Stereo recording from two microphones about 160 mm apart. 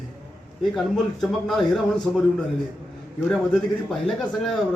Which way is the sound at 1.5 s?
Centre (ahead or behind).